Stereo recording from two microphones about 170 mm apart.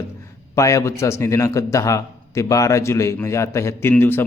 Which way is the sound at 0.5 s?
15° left (ahead or behind).